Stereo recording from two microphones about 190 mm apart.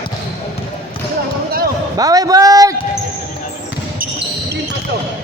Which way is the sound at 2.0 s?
20° right (ahead or behind).